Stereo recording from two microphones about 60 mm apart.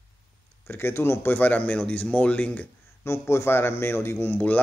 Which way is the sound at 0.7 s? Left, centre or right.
Left.